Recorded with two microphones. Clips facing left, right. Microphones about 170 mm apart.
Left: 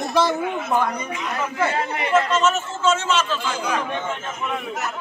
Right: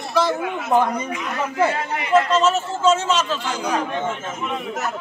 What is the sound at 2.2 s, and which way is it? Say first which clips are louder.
A man's voice: right 2 dB; 35° right (ahead or behind).